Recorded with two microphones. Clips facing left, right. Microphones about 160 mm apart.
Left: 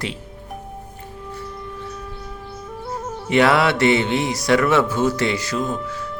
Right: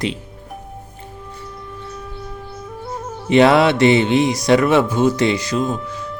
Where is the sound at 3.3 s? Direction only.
25° right (ahead or behind).